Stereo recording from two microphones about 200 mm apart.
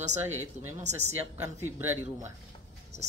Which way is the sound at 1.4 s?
15° right (ahead or behind).